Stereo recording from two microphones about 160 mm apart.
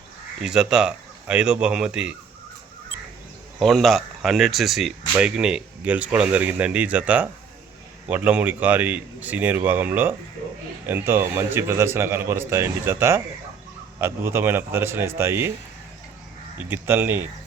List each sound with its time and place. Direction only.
0.4 s speech: 5° right (ahead or behind)
3.6 s speech: centre (ahead or behind); by 15.5 s 15° right (ahead or behind)
16.6 s speech: 15° right (ahead or behind)